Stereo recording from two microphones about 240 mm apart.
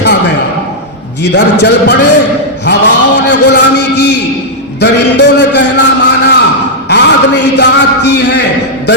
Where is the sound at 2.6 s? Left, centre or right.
Left.